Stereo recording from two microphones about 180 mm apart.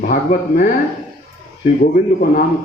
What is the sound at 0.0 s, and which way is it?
Speech, 50° left (ahead or behind).